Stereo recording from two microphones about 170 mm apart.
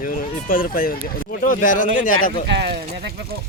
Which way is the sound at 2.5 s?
90° right.